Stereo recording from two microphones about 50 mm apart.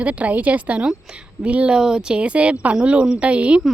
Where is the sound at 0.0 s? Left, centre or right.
Right.